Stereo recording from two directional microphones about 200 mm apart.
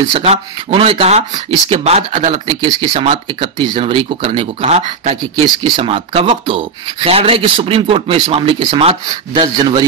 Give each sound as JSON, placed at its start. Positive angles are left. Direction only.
{"t": 0.1, "sound": "speech", "side_deg": -30}